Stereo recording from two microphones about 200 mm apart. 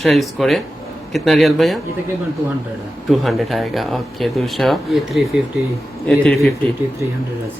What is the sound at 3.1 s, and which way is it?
Speech, centre (ahead or behind).